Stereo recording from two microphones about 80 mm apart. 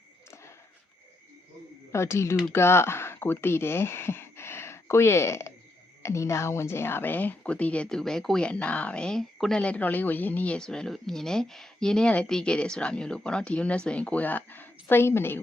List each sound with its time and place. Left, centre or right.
1.9 s speech: left; by 10.6 s centre
10.6 s speech: centre; by 15.4 s left